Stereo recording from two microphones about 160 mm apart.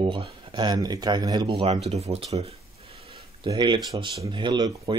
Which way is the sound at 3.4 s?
30° right (ahead or behind).